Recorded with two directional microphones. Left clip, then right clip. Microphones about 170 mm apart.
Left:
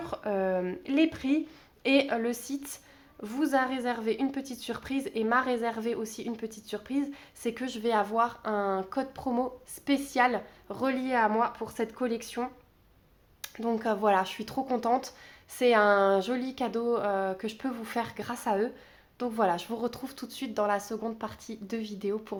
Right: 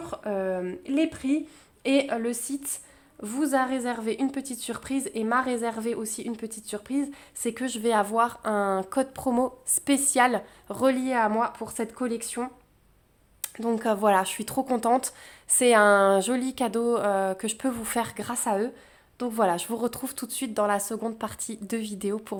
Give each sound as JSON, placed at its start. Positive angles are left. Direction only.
{"t": 0.0, "sound": "a woman's voice", "side_deg": -15}